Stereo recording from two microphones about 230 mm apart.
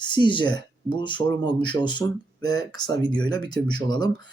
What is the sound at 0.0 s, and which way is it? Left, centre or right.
Speech, centre.